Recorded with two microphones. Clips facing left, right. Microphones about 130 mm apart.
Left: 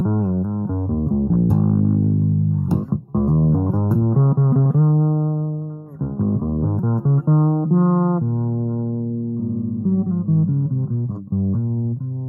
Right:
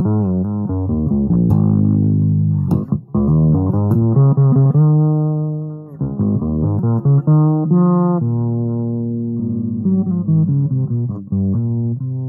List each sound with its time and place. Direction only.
0.0 s music: 35° right (ahead or behind)
9.8 s music: 45° right (ahead or behind)